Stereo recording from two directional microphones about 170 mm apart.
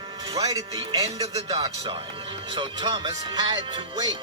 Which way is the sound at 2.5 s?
25° right (ahead or behind).